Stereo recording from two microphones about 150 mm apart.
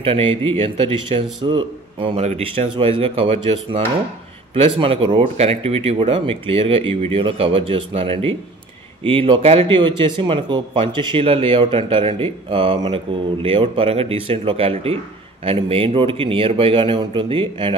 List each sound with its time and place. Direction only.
0.0 s a man's voice: 40° right (ahead or behind)